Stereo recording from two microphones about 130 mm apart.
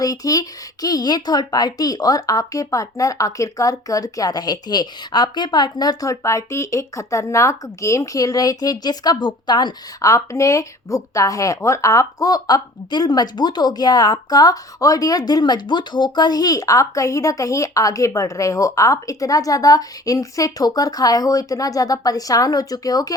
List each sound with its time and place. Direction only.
0.0 s speech: 30° left (ahead or behind)